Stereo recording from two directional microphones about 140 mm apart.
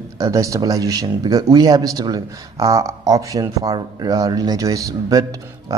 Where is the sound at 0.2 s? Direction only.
25° right (ahead or behind).